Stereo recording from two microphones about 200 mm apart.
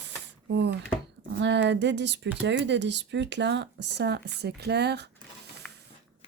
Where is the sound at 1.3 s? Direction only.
60° right (ahead or behind).